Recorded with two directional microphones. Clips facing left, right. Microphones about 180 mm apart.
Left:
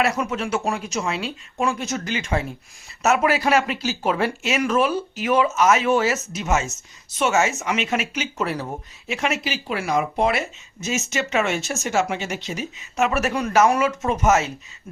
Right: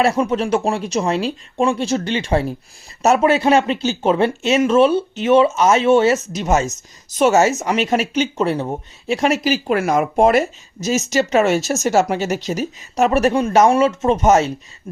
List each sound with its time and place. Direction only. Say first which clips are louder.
0.0 s speech: right 6 dB; 30° right (ahead or behind)